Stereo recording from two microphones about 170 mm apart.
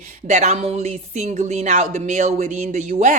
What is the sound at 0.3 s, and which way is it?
A woman's voice, 40° right (ahead or behind).